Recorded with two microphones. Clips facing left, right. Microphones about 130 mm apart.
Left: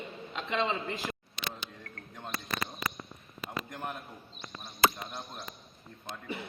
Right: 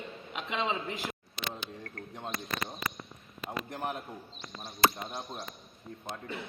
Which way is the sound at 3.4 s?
30° right (ahead or behind).